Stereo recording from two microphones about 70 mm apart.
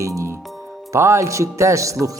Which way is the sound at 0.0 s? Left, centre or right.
Right.